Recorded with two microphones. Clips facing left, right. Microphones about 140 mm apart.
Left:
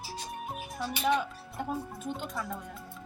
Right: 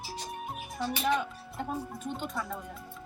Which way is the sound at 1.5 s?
Centre (ahead or behind).